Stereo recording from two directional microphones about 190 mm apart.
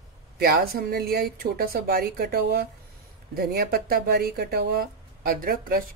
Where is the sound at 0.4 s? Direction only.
55° right (ahead or behind).